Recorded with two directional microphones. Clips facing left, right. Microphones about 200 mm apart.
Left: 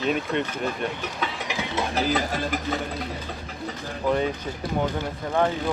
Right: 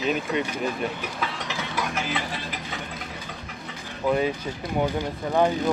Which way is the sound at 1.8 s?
30° left (ahead or behind).